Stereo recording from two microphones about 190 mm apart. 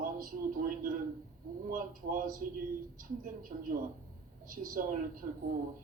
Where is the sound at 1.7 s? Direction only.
45° right (ahead or behind).